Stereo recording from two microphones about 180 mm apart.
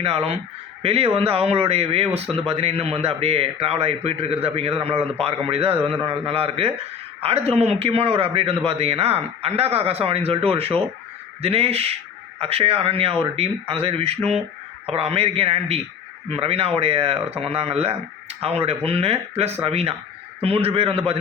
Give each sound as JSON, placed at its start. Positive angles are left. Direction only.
{"t": 0.0, "sound": "a man's voice", "side_deg": -35}